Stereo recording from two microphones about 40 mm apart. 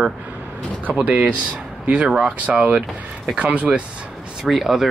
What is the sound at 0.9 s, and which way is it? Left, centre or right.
Speech, right.